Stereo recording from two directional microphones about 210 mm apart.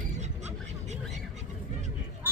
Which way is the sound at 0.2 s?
30° right (ahead or behind).